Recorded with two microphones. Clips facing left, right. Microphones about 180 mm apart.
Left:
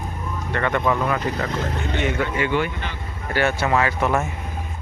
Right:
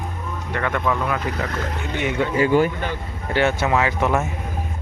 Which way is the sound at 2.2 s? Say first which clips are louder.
Right 9 dB; 35° right (ahead or behind).